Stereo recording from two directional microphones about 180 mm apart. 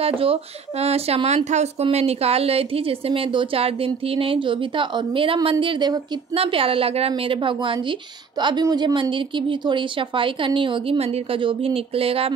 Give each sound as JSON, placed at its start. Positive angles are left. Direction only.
{"t": 0.0, "sound": "a woman's voice", "side_deg": -30}